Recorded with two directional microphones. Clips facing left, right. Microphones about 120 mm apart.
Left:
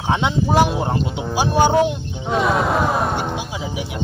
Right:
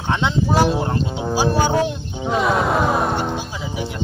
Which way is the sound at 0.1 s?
15° left (ahead or behind).